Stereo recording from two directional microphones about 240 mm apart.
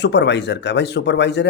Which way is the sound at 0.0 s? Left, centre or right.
Left.